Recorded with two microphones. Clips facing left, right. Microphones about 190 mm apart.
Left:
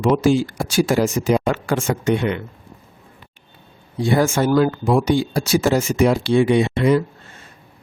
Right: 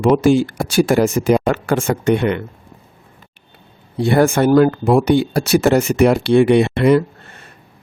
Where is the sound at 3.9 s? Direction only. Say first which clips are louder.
Right 4 dB; 65° right (ahead or behind).